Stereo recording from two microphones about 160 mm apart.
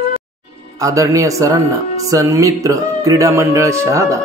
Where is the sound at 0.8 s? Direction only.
20° right (ahead or behind).